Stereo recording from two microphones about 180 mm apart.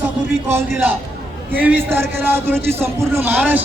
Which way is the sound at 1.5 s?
10° right (ahead or behind).